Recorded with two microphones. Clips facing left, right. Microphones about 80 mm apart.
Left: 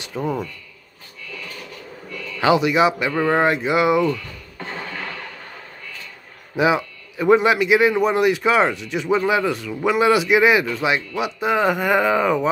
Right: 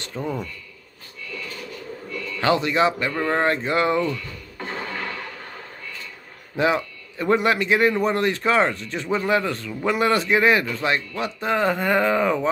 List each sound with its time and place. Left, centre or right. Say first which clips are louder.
0.0 s speech: left 4 dB; centre
2.4 s a man's voice: left 3 dB; centre
6.5 s a man's voice: left 3 dB; centre